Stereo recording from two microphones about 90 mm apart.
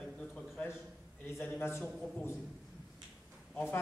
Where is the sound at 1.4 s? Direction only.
25° left (ahead or behind).